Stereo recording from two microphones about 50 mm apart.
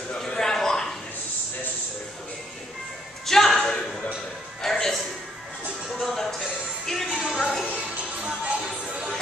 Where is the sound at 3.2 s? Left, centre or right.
Centre.